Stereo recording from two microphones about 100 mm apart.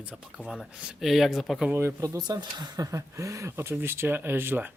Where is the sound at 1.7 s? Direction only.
30° right (ahead or behind).